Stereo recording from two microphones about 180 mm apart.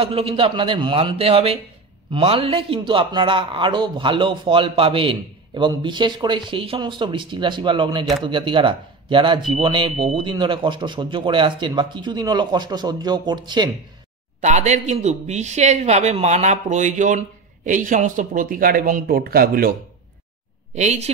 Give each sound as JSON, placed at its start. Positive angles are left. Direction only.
{"t": 0.0, "sound": "a man's voice", "side_deg": -30}
{"t": 14.4, "sound": "a man's voice", "side_deg": -40}
{"t": 20.7, "sound": "a man's voice", "side_deg": -40}